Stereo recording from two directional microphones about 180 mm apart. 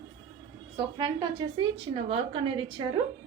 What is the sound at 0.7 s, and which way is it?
A woman's voice, 25° right (ahead or behind).